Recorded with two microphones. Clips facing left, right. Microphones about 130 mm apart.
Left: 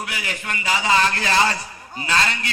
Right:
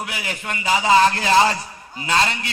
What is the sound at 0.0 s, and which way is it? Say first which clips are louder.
Speech: right 1 dB; 20° right (ahead or behind).